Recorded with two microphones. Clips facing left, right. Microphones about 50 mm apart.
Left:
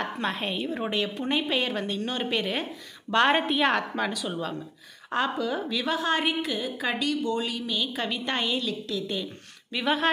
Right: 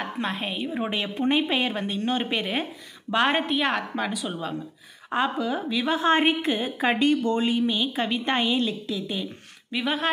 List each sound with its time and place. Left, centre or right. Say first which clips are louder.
0.0 s a woman's voice: even; centre
5.9 s a woman's voice: right 6 dB; right; by 10.0 s centre